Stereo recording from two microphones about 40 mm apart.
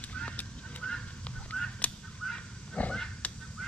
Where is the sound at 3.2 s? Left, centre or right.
Left.